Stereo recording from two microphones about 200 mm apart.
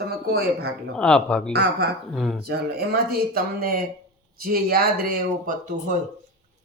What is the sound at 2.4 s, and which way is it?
Speech, 50° right (ahead or behind).